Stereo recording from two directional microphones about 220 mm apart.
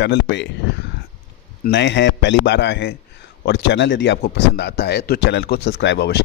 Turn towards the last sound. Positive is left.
turn(degrees=50)  # may be behind; listen again after turning